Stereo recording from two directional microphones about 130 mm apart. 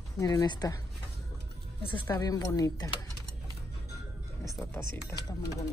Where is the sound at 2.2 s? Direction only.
30° left (ahead or behind).